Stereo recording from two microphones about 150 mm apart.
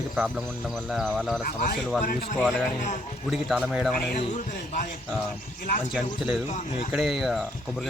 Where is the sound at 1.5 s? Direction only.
75° left (ahead or behind).